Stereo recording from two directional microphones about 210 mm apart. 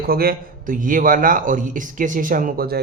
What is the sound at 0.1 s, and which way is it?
Speech, 45° right (ahead or behind).